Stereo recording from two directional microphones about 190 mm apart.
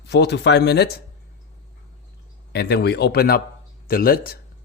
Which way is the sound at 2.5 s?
60° left (ahead or behind).